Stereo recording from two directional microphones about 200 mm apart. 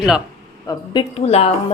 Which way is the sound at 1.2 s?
30° left (ahead or behind).